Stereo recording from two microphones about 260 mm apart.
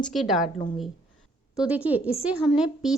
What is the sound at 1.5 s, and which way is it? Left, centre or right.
A woman's voice, centre.